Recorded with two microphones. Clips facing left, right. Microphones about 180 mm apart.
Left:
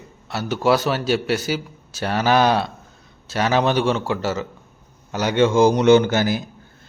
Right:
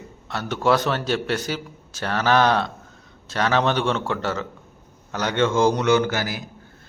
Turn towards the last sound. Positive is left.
turn(degrees=25)  # may be behind; listen again after turning